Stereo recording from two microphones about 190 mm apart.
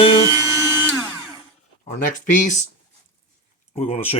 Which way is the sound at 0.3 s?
15° right (ahead or behind).